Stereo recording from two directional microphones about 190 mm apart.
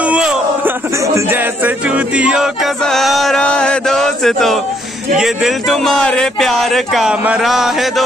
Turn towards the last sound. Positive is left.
turn(degrees=0)  # may be behind; listen again after turning